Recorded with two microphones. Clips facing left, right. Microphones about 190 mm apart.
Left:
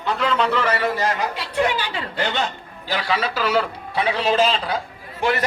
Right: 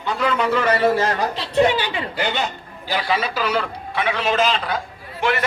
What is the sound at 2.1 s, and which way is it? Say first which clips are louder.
A man's voice: left 2 dB; 5° right (ahead or behind).